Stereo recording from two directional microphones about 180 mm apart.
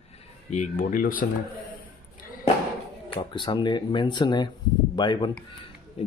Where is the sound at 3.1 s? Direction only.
25° left (ahead or behind).